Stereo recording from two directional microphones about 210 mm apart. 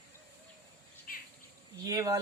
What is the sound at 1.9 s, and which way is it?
Speech, 15° right (ahead or behind).